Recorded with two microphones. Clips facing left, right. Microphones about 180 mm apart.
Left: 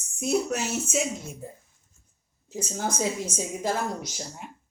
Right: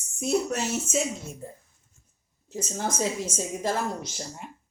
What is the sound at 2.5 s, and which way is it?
Speech, 10° left (ahead or behind).